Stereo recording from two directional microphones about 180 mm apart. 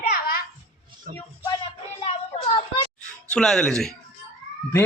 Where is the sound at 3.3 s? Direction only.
5° left (ahead or behind).